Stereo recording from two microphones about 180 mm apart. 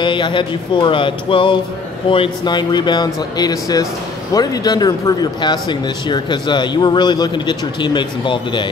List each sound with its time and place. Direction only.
0.0 s speech: 25° left (ahead or behind)